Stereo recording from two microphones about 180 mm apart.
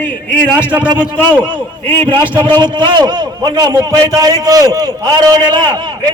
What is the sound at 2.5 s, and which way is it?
A man's voice, 25° right (ahead or behind).